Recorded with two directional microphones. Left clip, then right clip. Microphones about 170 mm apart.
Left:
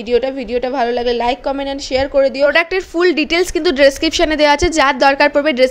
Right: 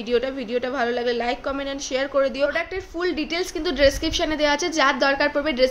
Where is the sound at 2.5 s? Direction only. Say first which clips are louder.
Left 12 dB; 55° left (ahead or behind).